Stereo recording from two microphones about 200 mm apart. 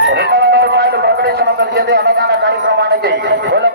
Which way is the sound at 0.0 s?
55° right (ahead or behind).